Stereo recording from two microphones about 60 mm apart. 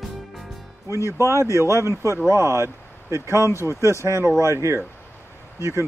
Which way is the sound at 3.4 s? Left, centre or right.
Left.